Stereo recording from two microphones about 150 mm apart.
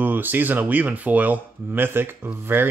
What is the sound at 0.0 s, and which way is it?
Speech, 15° right (ahead or behind).